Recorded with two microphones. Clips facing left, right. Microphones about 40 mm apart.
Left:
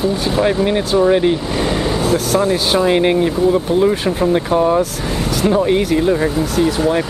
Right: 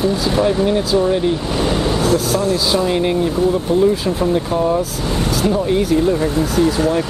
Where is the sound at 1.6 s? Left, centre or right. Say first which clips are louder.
Even; centre.